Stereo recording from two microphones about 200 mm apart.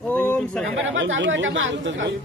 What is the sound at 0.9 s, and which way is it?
Speech, 70° right (ahead or behind).